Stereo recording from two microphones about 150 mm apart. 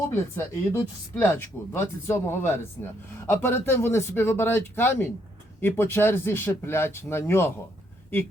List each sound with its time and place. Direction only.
0.1 s speech: 15° left (ahead or behind)